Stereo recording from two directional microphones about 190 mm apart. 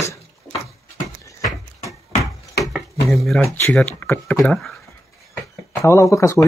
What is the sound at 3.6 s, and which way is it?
Speech, 5° left (ahead or behind).